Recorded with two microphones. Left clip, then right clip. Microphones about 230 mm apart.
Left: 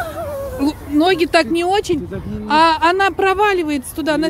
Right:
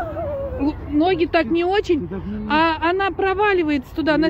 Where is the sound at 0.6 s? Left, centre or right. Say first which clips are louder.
Left 4 dB; left.